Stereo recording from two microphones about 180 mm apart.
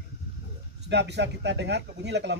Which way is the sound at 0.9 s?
70° right (ahead or behind).